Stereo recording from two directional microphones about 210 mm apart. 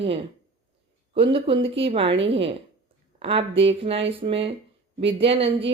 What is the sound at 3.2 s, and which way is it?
A woman's voice, 25° right (ahead or behind).